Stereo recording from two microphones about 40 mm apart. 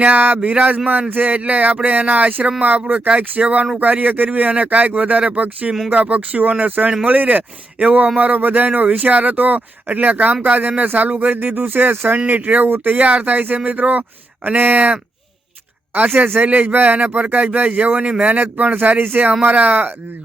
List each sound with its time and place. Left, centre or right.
0.0 s speech: right
1.1 s speech: right
11.3 s speech: right
13.0 s speech: right
16.0 s speech: right
16.6 s speech: right